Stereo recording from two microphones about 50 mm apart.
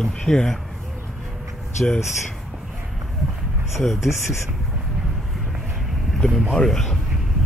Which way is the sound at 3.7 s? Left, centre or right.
Centre.